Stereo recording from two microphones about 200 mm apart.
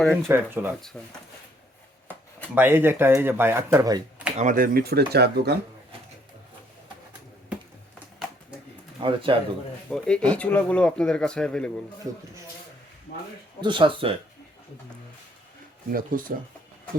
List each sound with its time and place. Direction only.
0.0 s speech: 5° left (ahead or behind)
0.3 s speech: 10° right (ahead or behind)
0.9 s speech: 5° left (ahead or behind)
2.6 s speech: 10° right (ahead or behind)
4.4 s speech: 40° right (ahead or behind)
9.0 s speech: 25° right (ahead or behind)
9.9 s speech: 5° left (ahead or behind)
13.6 s speech: 25° right (ahead or behind)
15.9 s speech: 45° right (ahead or behind)